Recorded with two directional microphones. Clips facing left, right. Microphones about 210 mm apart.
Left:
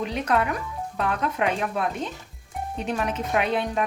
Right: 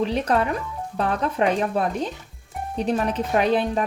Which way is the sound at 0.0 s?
30° right (ahead or behind).